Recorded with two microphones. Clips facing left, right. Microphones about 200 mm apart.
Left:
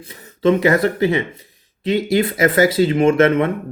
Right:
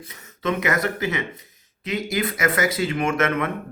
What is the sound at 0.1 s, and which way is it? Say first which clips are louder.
Speech: left 10 dB; 30° left (ahead or behind).